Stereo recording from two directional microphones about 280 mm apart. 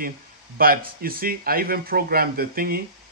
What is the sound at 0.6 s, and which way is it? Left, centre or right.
Speech, right.